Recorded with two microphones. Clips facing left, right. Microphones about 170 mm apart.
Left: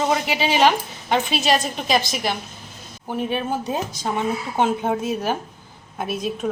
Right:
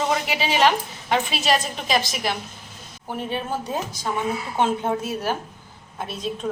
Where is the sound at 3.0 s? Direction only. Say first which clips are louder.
Left 4 dB; 15° left (ahead or behind).